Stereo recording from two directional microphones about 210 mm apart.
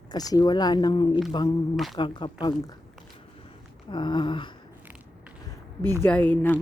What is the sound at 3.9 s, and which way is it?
Speech, 20° left (ahead or behind).